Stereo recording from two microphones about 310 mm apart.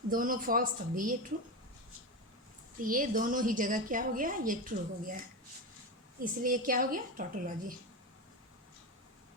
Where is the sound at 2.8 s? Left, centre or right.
Right.